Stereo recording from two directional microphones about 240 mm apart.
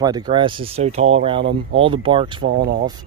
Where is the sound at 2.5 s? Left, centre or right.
Right.